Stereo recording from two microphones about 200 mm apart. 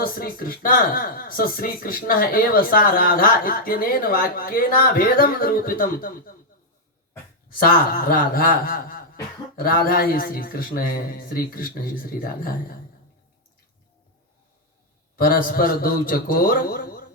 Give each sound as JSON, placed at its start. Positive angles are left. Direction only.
{"t": 0.0, "sound": "speech", "side_deg": 45}
{"t": 7.6, "sound": "speech", "side_deg": 45}
{"t": 15.1, "sound": "speech", "side_deg": 45}